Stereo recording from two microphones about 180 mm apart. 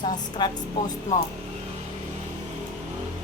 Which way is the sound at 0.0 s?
25° left (ahead or behind).